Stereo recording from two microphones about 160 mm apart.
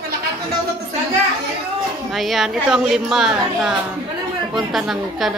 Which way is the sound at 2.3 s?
5° right (ahead or behind).